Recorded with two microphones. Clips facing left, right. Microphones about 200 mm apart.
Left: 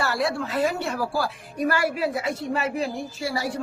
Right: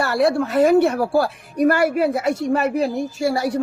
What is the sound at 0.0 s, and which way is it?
A woman's voice, 60° right (ahead or behind).